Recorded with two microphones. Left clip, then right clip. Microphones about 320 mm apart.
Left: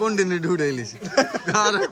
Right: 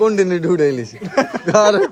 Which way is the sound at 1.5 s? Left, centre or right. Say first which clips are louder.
Right 8 dB; centre.